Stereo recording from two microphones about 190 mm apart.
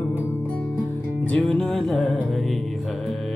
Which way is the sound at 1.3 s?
5° left (ahead or behind).